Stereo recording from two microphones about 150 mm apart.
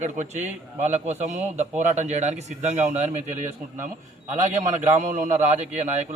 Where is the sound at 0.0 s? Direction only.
50° right (ahead or behind).